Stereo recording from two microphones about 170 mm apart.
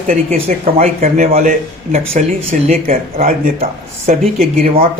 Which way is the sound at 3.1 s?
55° right (ahead or behind).